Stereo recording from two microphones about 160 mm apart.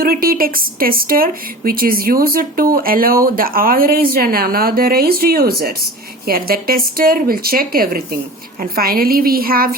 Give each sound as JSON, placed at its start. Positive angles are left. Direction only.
{"t": 0.0, "sound": "speech", "side_deg": -65}